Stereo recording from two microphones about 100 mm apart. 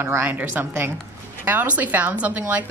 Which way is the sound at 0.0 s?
20° right (ahead or behind).